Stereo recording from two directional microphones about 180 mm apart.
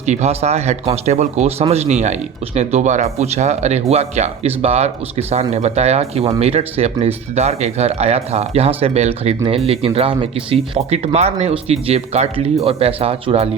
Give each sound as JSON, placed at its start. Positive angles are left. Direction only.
{"t": 0.0, "sound": "speech", "side_deg": -40}